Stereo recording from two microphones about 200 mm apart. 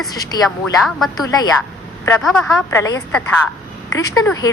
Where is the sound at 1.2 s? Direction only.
20° left (ahead or behind).